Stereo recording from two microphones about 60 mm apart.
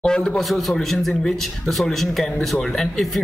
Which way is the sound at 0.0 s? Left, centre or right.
Centre.